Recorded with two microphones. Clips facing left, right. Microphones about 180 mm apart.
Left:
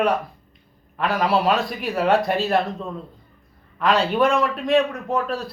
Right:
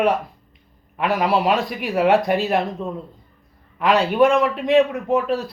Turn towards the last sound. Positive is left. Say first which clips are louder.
# right 4 dB
turn(degrees=-20)  # may be behind; listen again after turning